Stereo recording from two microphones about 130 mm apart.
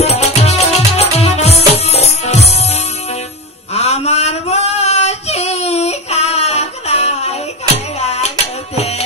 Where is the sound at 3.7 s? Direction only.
55° left (ahead or behind).